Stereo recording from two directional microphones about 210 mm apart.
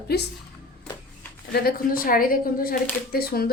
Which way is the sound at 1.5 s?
45° left (ahead or behind).